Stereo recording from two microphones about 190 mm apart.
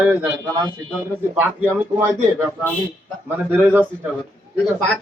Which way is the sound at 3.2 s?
10° right (ahead or behind).